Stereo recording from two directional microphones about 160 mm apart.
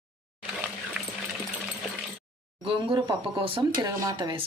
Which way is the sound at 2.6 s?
35° right (ahead or behind).